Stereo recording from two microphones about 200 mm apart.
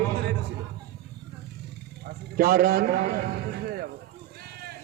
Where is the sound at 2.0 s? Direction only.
50° right (ahead or behind).